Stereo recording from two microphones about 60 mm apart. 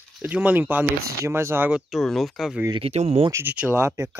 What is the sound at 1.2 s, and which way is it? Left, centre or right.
Speech, right.